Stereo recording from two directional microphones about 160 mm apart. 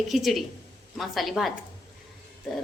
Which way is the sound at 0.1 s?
Centre (ahead or behind).